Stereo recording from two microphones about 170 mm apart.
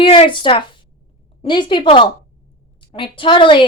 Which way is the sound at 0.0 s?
30° left (ahead or behind).